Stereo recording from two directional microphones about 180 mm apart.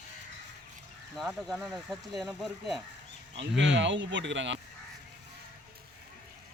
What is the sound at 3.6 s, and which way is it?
Speech, 85° right.